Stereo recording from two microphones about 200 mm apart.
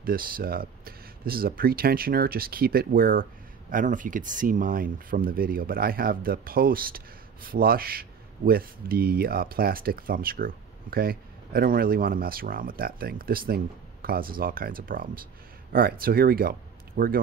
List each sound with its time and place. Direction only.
0.0 s speech: 45° right (ahead or behind)